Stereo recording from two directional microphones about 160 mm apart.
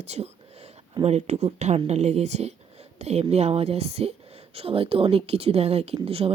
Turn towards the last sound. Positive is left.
turn(degrees=-40)  # may be behind; listen again after turning